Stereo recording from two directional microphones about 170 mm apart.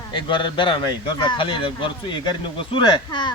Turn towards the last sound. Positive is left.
turn(degrees=25)  # may be behind; listen again after turning